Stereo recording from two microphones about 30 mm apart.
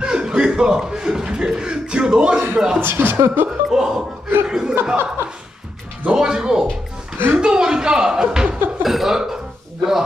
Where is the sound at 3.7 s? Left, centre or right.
Centre.